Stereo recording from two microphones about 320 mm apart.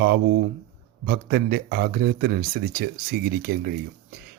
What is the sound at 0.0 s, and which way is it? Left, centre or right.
Speech, right.